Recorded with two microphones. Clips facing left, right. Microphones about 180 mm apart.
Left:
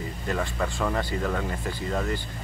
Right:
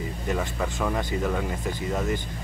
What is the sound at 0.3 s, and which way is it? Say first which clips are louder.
Speech: even; 15° right (ahead or behind).